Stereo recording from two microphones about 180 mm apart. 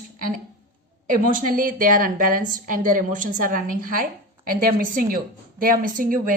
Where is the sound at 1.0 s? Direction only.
50° right (ahead or behind).